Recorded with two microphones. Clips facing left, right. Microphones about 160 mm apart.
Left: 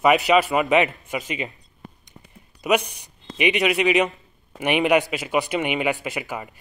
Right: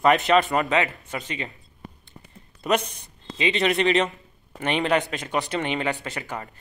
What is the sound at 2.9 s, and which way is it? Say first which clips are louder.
Speech: even; 15° left (ahead or behind).